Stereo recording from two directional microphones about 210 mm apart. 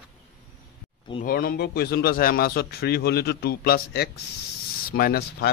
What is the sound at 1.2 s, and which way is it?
A man's voice, 45° left (ahead or behind).